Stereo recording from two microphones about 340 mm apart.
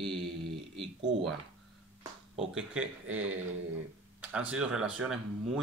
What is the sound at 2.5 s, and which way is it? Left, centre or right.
Speech, centre.